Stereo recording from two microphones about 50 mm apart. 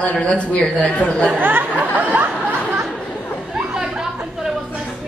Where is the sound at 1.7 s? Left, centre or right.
Right.